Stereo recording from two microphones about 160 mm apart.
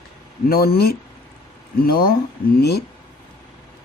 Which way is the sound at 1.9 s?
70° left (ahead or behind).